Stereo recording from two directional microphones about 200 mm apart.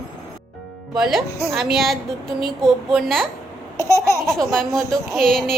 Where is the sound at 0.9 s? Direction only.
Centre (ahead or behind).